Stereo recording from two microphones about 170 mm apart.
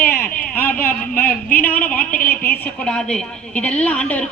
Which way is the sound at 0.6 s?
10° left (ahead or behind).